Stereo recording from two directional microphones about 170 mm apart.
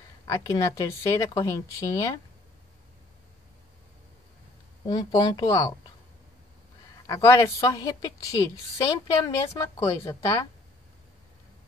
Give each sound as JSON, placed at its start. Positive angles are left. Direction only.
{"t": 0.2, "sound": "a woman's voice", "side_deg": 20}
{"t": 4.8, "sound": "a woman's voice", "side_deg": 25}
{"t": 7.1, "sound": "a woman's voice", "side_deg": 15}